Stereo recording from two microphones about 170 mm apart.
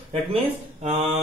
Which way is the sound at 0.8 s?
35° right (ahead or behind).